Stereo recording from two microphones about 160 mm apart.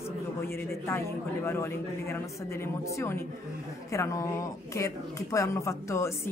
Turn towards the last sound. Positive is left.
turn(degrees=20)  # may be behind; listen again after turning